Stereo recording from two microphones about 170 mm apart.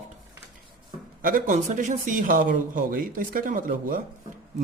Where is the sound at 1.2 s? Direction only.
55° right (ahead or behind).